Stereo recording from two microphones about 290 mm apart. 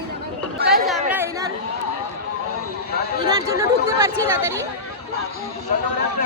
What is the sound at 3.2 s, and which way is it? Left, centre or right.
A woman's voice, centre.